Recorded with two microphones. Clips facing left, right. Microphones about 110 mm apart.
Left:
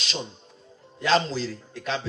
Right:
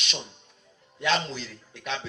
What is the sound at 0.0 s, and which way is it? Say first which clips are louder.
A man's voice: left 4 dB; 35° left (ahead or behind).